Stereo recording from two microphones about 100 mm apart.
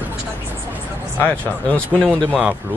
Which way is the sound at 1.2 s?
15° left (ahead or behind).